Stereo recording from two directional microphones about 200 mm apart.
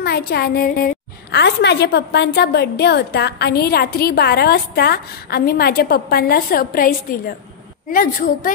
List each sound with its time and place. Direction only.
0.0 s a woman's voice: 50° left (ahead or behind)
1.3 s a woman's voice: 60° left (ahead or behind); by 8.5 s 40° left (ahead or behind)